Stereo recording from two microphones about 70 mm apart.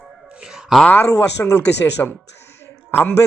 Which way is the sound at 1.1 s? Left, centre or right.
Left.